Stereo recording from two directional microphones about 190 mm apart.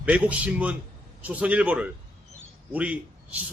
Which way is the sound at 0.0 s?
5° right (ahead or behind).